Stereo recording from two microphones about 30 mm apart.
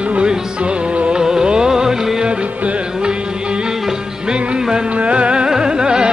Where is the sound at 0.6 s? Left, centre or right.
Right.